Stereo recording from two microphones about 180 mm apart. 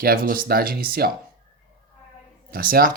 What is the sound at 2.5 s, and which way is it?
Speech, 55° right (ahead or behind).